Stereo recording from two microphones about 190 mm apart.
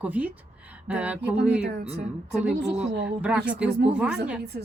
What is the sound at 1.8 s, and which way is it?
Speech, 35° right (ahead or behind).